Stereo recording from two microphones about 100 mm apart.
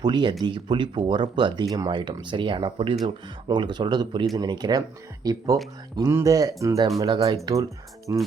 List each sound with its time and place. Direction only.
0.0 s speech: 50° right (ahead or behind)
3.0 s speech: 45° right (ahead or behind)
7.0 s speech: 45° right (ahead or behind)
7.5 s speech: 30° right (ahead or behind)